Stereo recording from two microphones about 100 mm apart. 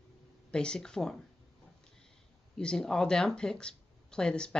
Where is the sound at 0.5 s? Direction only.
10° left (ahead or behind).